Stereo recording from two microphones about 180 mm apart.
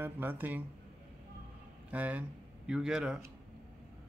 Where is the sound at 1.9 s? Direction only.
10° right (ahead or behind).